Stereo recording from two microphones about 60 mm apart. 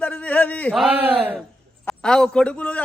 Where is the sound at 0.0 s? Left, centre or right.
Left.